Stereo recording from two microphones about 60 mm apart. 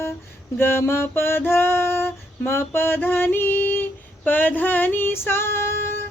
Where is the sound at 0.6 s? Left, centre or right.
Left.